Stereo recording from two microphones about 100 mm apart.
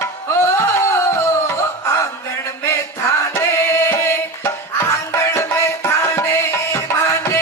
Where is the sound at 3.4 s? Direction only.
25° left (ahead or behind).